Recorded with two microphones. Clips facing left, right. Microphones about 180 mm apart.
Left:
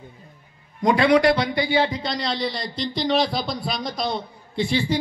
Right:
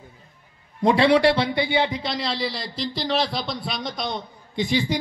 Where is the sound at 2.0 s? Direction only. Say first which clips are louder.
Left 1 dB; centre (ahead or behind).